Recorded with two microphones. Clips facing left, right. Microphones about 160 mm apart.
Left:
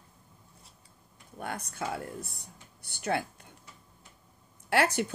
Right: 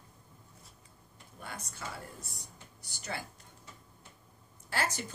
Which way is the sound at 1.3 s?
60° left (ahead or behind).